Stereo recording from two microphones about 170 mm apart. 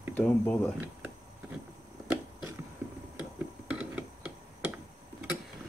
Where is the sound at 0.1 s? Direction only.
10° left (ahead or behind).